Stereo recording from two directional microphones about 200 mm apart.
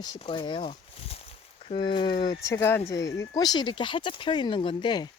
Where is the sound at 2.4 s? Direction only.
15° left (ahead or behind).